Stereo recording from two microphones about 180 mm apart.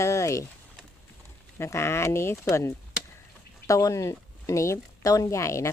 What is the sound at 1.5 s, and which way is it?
A woman's voice, 15° left (ahead or behind).